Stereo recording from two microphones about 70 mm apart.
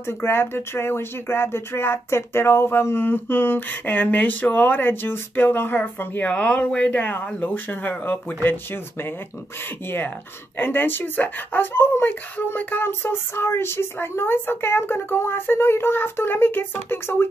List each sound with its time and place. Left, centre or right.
0.0 s speech: left